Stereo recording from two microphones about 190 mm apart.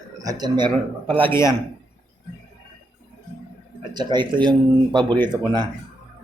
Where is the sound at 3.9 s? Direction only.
20° right (ahead or behind).